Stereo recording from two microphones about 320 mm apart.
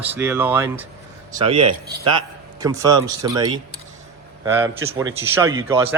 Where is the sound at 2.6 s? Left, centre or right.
Centre.